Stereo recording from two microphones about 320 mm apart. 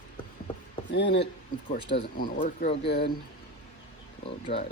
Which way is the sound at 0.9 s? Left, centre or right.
Left.